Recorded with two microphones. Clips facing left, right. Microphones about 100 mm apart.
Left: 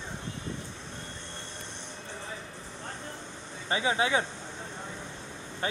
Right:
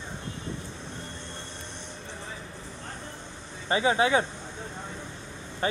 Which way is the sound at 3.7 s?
45° right (ahead or behind).